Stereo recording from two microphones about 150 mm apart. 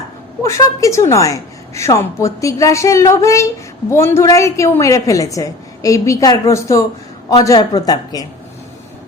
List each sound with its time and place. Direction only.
0.4 s a woman's voice: 20° left (ahead or behind)